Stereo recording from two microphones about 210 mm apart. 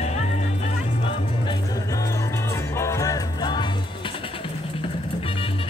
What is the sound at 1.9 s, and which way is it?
Music, 15° left (ahead or behind).